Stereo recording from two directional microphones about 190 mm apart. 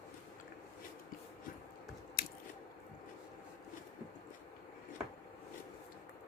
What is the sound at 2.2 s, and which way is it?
Biting, 50° left (ahead or behind).